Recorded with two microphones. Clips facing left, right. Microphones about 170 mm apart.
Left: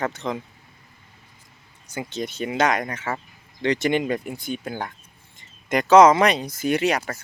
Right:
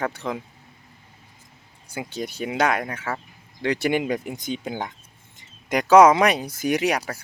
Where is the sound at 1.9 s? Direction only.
10° right (ahead or behind).